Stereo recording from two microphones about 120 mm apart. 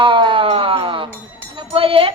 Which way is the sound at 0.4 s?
55° right (ahead or behind).